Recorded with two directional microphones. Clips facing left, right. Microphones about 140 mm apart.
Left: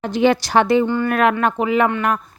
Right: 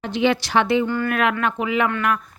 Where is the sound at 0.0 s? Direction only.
45° left (ahead or behind).